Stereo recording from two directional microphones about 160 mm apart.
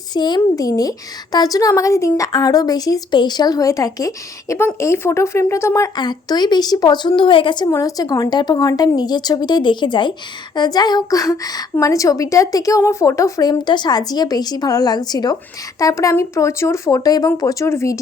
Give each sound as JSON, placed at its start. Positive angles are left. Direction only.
{"t": 0.1, "sound": "a woman's voice", "side_deg": 25}